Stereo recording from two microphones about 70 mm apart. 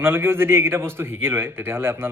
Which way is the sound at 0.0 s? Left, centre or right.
Right.